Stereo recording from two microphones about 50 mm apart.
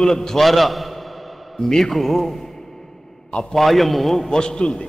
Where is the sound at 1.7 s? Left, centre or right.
Centre.